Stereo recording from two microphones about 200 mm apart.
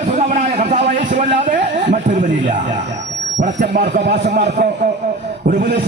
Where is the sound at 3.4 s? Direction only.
40° right (ahead or behind).